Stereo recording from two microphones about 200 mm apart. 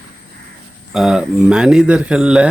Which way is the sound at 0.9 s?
5° right (ahead or behind).